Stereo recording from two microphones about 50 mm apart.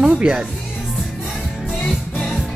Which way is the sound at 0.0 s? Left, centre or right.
Centre.